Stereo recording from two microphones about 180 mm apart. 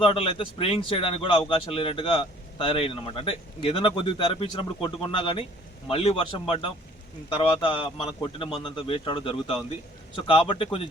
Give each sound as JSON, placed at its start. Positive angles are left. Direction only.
{"t": 0.0, "sound": "a man's voice", "side_deg": 30}